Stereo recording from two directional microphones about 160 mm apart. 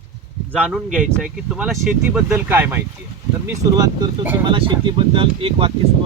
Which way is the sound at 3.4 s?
20° right (ahead or behind).